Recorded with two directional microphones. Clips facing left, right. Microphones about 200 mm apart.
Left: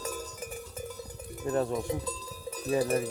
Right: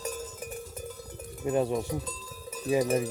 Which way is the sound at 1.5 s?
15° right (ahead or behind).